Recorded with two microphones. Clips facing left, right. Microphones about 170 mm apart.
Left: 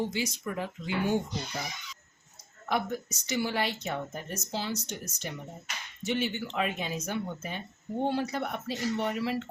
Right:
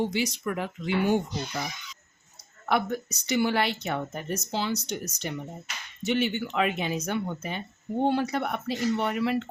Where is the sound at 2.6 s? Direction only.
70° right (ahead or behind).